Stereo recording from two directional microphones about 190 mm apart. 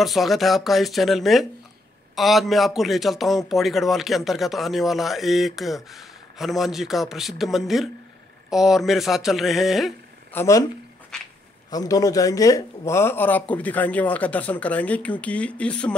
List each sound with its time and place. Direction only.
0.0 s a man's voice: centre (ahead or behind)
10.3 s speech: 15° left (ahead or behind)
11.1 s a sound: 5° left (ahead or behind)
11.7 s speech: 20° left (ahead or behind)